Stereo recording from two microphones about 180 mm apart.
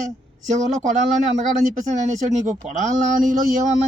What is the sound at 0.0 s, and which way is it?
Speech, 45° right (ahead or behind).